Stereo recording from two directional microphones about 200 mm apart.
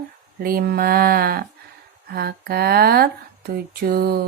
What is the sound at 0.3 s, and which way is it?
Speech, 50° right (ahead or behind).